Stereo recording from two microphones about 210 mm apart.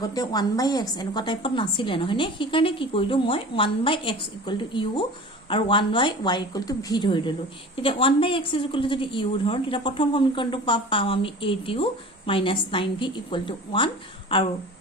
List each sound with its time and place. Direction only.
0.0 s a woman's voice: 20° left (ahead or behind)